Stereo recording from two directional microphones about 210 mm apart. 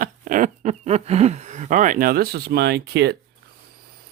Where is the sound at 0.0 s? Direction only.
40° right (ahead or behind).